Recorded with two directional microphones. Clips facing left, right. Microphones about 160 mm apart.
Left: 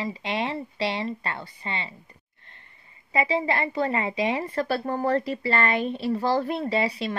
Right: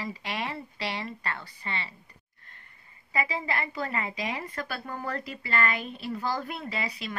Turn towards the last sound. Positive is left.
turn(degrees=30)  # may be behind; listen again after turning